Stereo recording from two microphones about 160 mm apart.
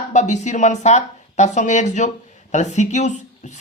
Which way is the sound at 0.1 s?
50° left (ahead or behind).